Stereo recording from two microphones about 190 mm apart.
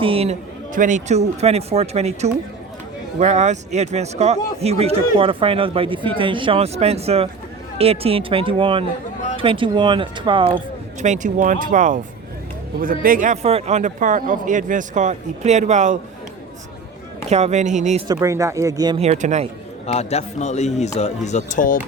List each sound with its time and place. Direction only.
0.0 s a man's voice: 30° right (ahead or behind)
0.7 s a man's voice: 45° right (ahead or behind); by 10.6 s 25° right (ahead or behind)
11.0 s a man's voice: 40° right (ahead or behind)
17.2 s a man's voice: 35° right (ahead or behind)
18.1 s speech: 15° right (ahead or behind)
18.9 s a man's voice: 35° right (ahead or behind)
19.9 s speech: 35° left (ahead or behind)